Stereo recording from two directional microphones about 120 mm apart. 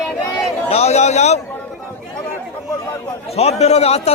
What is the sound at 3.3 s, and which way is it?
Speech, 60° left (ahead or behind).